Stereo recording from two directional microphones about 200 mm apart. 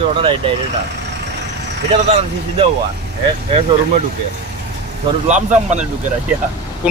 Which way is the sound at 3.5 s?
30° right (ahead or behind).